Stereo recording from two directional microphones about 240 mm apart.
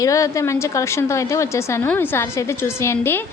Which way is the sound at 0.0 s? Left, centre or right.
Centre.